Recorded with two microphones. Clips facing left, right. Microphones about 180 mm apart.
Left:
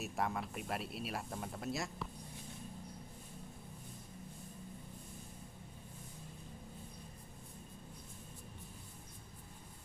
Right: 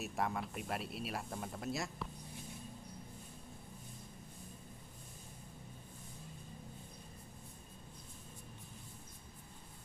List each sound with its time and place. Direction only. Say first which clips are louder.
0.0 s speech: even; centre (ahead or behind)